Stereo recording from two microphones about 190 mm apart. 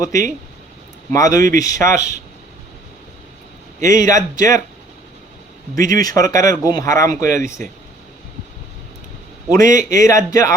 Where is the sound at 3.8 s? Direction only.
15° left (ahead or behind).